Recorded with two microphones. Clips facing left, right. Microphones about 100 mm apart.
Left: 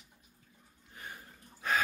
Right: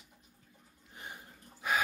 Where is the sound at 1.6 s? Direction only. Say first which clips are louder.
Even; 10° right (ahead or behind).